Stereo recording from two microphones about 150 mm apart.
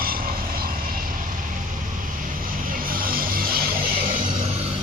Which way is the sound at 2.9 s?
75° right (ahead or behind).